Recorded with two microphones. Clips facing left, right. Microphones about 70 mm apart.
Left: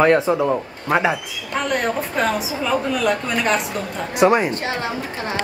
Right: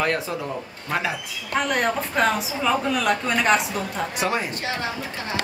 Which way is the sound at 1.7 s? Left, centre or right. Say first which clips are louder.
Left 4 dB; centre.